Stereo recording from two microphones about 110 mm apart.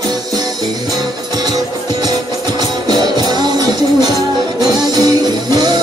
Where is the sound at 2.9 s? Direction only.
40° right (ahead or behind).